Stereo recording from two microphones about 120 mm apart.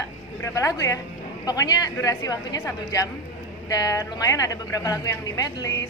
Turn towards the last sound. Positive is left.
turn(degrees=30)  # may be behind; listen again after turning